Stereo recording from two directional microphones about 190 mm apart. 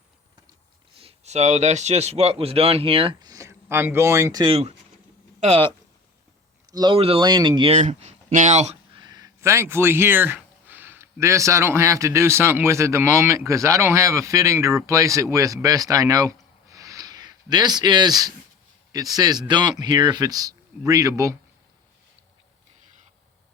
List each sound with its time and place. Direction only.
0.9 s speech: 30° right (ahead or behind)
7.8 s speech: 35° right (ahead or behind); by 16.3 s 20° right (ahead or behind)
16.7 s a sound: 15° right (ahead or behind)
18.9 s speech: 20° right (ahead or behind)